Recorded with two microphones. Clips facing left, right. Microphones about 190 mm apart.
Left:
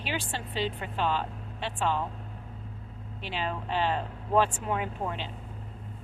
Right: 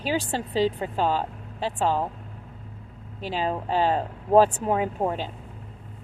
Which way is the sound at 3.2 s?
40° right (ahead or behind).